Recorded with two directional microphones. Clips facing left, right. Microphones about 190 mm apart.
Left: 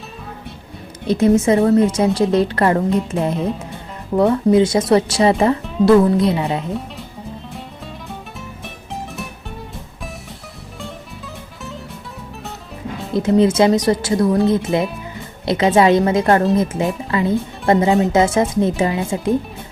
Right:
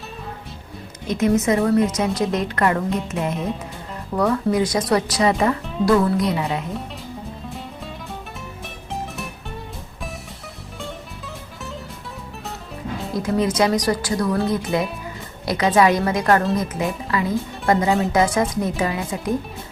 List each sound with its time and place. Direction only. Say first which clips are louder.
1.0 s a woman's voice: left 5 dB; 30° left (ahead or behind)
8.6 s music: even; centre (ahead or behind)
13.1 s speech: left 6 dB; 25° left (ahead or behind)